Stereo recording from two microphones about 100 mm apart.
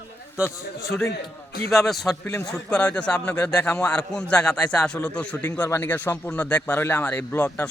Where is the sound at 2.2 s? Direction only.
30° left (ahead or behind).